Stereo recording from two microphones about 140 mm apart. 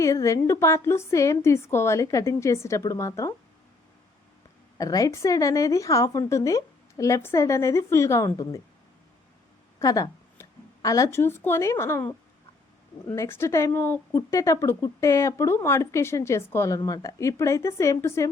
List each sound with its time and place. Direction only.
0.0 s a woman's voice: 25° left (ahead or behind)
4.8 s a woman's voice: 25° left (ahead or behind)
9.7 s a sound: 25° left (ahead or behind)
10.8 s a woman's voice: 25° left (ahead or behind)
13.1 s a woman's voice: 15° left (ahead or behind)